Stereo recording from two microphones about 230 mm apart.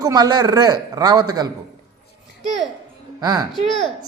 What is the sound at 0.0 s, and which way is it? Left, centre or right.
Speech, centre.